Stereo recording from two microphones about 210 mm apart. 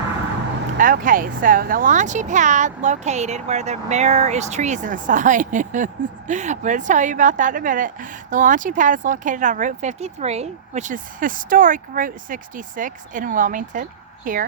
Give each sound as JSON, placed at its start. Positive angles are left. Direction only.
{"t": 0.8, "sound": "speech", "side_deg": -40}